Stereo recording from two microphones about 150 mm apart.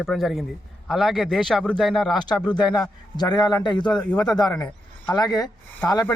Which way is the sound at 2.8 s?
30° left (ahead or behind).